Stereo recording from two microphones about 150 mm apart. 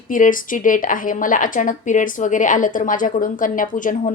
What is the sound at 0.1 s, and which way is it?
Speech, 60° left (ahead or behind).